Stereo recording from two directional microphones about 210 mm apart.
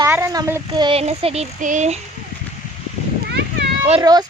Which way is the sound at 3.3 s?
55° right (ahead or behind).